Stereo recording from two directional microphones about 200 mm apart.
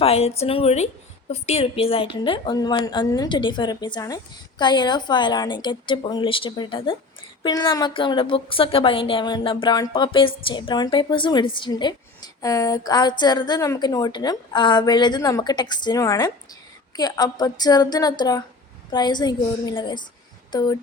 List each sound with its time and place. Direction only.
0.0 s a woman's voice: 30° left (ahead or behind)